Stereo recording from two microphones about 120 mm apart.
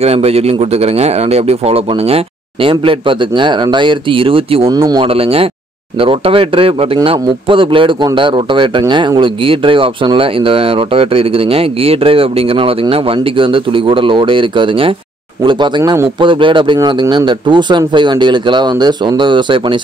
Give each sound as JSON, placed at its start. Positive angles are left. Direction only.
{"t": 0.0, "sound": "speech", "side_deg": -60}
{"t": 4.6, "sound": "speech", "side_deg": -30}
{"t": 5.0, "sound": "speech", "side_deg": -50}
{"t": 15.4, "sound": "speech", "side_deg": -35}
{"t": 16.2, "sound": "speech", "side_deg": -45}